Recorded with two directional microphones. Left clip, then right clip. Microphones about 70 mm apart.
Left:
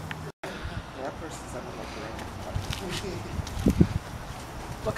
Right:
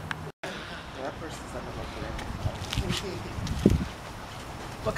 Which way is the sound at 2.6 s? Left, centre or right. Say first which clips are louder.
Right 2 dB; centre.